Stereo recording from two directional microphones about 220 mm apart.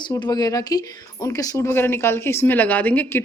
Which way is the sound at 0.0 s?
20° left (ahead or behind).